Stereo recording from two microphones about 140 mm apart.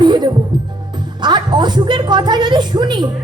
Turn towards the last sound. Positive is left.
turn(degrees=-30)  # may be behind; listen again after turning